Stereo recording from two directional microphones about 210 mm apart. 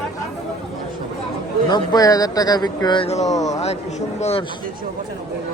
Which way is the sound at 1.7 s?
20° left (ahead or behind).